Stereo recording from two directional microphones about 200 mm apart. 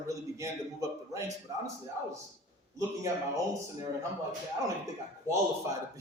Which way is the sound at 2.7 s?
15° right (ahead or behind).